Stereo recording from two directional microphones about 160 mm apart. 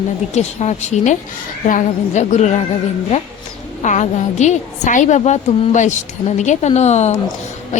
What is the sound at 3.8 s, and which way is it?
Speech, 50° left (ahead or behind).